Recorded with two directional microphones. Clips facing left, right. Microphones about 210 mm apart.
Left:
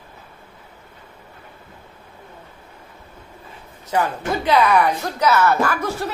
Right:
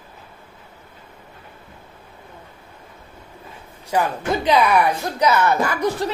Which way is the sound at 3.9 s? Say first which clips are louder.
Right 1 dB; 15° right (ahead or behind).